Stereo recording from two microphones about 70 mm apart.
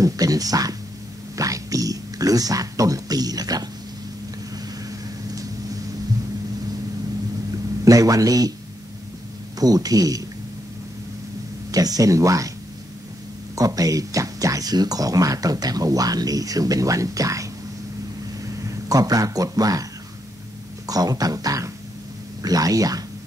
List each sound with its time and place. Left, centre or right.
0.0 s speech: right
4.8 s vehicle: right
7.8 s a man's voice: right
9.6 s speech: right
11.7 s speech: right
13.6 s speech: right
18.6 s speech: right